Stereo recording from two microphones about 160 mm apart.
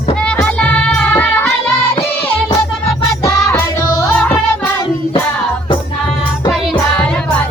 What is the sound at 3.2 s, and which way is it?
Music, 20° left (ahead or behind).